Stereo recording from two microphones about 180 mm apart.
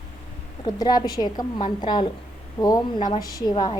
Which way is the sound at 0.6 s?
20° left (ahead or behind).